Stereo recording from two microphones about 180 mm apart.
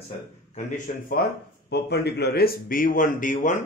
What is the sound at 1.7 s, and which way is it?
A man's voice, 65° left (ahead or behind).